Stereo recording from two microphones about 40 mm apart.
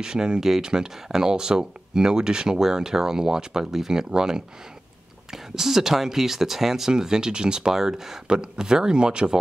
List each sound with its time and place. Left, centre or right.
0.0 s speech: centre
0.4 s speech: centre; by 9.4 s right